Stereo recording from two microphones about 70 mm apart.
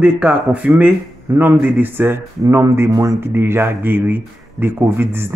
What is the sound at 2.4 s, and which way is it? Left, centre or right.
Speech, right.